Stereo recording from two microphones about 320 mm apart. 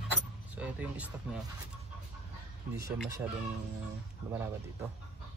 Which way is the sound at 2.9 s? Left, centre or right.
Centre.